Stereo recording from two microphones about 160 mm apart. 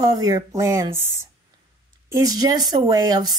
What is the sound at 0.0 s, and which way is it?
Speech, 25° right (ahead or behind).